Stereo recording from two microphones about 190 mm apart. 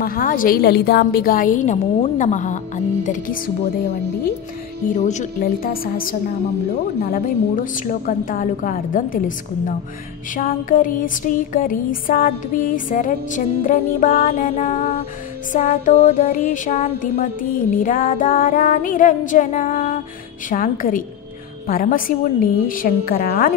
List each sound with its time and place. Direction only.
0.0 s music: 50° left (ahead or behind)
4.9 s music: 40° left (ahead or behind)
10.3 s music: 45° left (ahead or behind)